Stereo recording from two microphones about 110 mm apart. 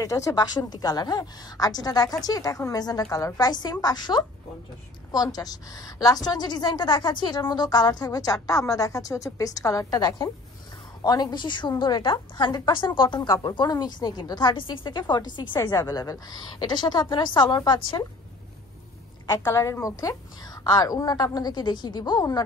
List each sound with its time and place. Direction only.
0.0 s a woman's voice: 30° left (ahead or behind)
17.6 s a woman's voice: 55° left (ahead or behind)
19.4 s a woman's voice: 25° left (ahead or behind)